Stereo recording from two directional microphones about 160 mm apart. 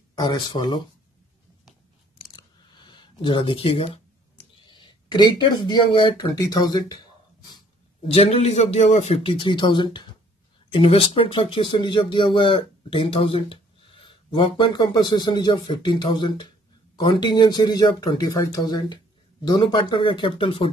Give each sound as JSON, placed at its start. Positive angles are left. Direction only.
{"t": 0.1, "sound": "speech", "side_deg": 25}
{"t": 2.3, "sound": "a sound", "side_deg": 30}
{"t": 4.6, "sound": "speech", "side_deg": 30}
{"t": 8.1, "sound": "speech", "side_deg": 40}